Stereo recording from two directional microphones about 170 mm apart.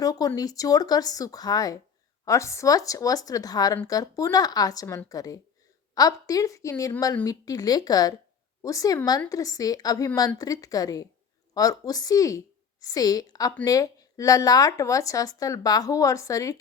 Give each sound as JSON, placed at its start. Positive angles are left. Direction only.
{"t": 0.0, "sound": "speech", "side_deg": 20}